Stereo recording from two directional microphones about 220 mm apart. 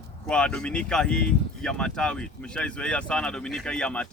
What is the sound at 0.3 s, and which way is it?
Speech, 5° left (ahead or behind).